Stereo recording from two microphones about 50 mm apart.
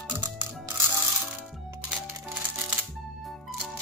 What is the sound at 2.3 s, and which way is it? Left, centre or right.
Music, right.